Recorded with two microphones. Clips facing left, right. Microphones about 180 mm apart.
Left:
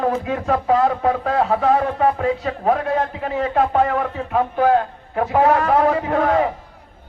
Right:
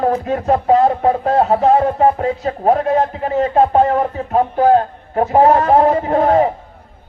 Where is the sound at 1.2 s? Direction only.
40° right (ahead or behind).